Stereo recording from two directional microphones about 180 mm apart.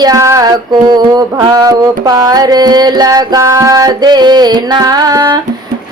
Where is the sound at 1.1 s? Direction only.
20° right (ahead or behind).